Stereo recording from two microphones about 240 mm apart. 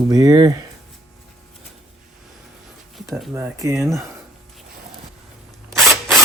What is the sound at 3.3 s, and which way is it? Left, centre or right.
Speech, centre.